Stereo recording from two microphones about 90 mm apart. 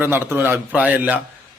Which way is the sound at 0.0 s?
25° right (ahead or behind).